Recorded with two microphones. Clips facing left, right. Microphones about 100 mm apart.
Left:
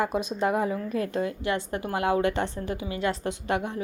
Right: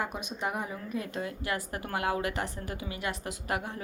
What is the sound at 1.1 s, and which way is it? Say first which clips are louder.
A woman's voice: left 6 dB; 30° left (ahead or behind).